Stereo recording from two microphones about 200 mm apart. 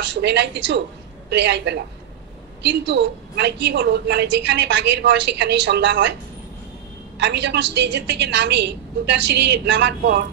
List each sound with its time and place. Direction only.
0.0 s a woman's voice: 60° right (ahead or behind)
7.2 s a woman's voice: 60° right (ahead or behind)